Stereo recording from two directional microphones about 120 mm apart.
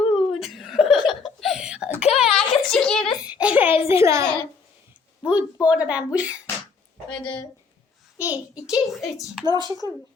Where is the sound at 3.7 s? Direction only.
55° left (ahead or behind).